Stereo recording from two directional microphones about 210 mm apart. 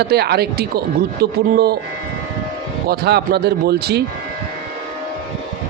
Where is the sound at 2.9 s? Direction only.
50° right (ahead or behind).